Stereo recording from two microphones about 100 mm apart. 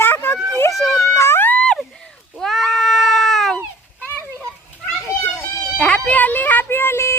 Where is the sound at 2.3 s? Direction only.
Centre (ahead or behind).